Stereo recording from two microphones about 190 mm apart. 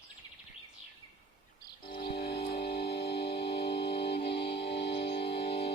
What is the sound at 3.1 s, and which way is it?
Music, 30° left (ahead or behind).